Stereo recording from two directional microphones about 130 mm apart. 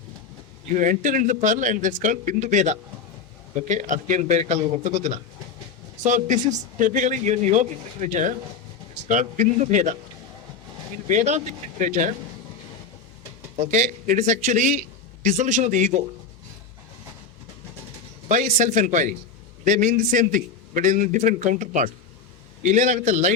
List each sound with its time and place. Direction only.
0.8 s a man's voice: 85° right
11.1 s a man's voice: 65° right (ahead or behind)
13.6 s a man's voice: 70° right (ahead or behind)
18.3 s a man's voice: 75° right (ahead or behind)
19.6 s a man's voice: 85° right
22.6 s a man's voice: 70° right (ahead or behind)